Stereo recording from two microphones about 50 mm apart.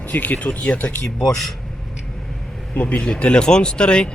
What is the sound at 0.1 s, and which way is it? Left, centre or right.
Speech, left.